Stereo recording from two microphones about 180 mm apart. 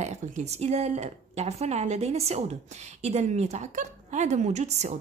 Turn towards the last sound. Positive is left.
turn(degrees=-40)  # may be behind; listen again after turning